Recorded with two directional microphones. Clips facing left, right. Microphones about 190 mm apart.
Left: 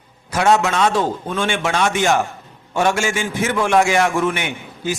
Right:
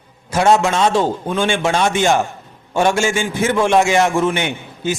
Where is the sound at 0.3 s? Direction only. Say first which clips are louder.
Right 2 dB; 30° right (ahead or behind).